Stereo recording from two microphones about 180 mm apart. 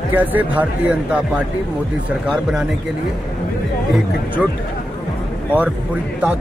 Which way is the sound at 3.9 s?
5° right (ahead or behind).